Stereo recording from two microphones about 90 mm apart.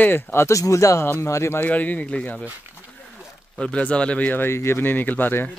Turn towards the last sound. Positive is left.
turn(degrees=20)  # may be behind; listen again after turning